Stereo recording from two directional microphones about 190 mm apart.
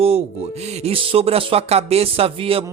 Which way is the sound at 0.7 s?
35° right (ahead or behind).